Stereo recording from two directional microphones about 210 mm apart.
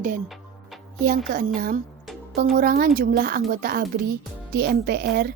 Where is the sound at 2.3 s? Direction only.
45° right (ahead or behind).